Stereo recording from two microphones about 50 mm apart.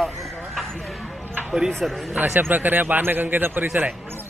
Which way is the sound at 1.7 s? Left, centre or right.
Centre.